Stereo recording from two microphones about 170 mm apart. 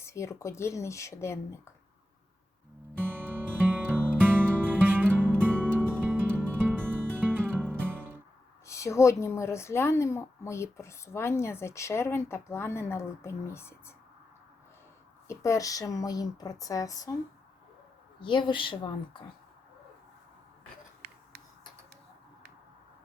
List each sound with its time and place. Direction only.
0.0 s a woman's voice: 15° left (ahead or behind)
3.0 s music: 10° right (ahead or behind)
8.6 s a woman's voice: 15° left (ahead or behind)
15.3 s speech: 15° left (ahead or behind)
18.2 s speech: 30° left (ahead or behind)